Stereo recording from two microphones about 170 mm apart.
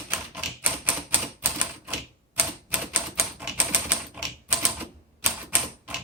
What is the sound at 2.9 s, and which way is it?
Typewriter, 10° right (ahead or behind).